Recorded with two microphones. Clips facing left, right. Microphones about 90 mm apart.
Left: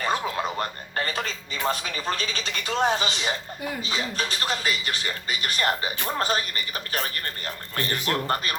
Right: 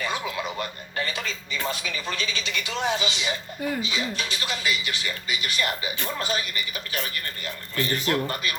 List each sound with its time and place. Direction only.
0.0 s music: 40° left (ahead or behind)
1.6 s speech: 40° left (ahead or behind)